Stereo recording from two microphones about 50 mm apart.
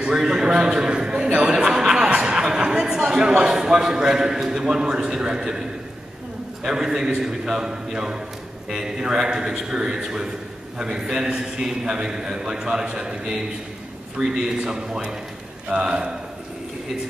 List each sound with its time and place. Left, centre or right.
0.0 s a man's voice: centre
14.2 s a man's voice: centre